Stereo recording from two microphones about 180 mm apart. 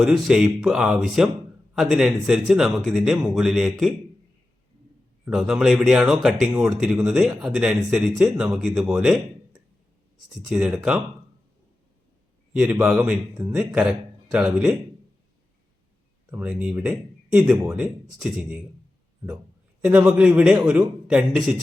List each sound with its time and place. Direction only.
0.0 s speech: centre (ahead or behind)
5.2 s speech: 5° right (ahead or behind)
6.5 s speech: 15° right (ahead or behind)
6.7 s a man's voice: 5° right (ahead or behind)
12.8 s speech: 5° right (ahead or behind)
16.3 s speech: 10° right (ahead or behind)
19.8 s speech: 5° right (ahead or behind)